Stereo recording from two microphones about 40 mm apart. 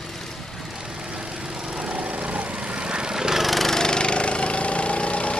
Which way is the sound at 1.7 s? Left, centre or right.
Right.